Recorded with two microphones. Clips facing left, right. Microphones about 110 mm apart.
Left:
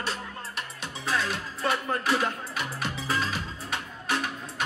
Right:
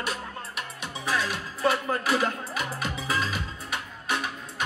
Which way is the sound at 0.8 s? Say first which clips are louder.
Right 1 dB; 15° right (ahead or behind).